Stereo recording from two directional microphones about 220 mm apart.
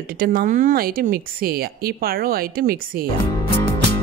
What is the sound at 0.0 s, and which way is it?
Speech, 40° right (ahead or behind).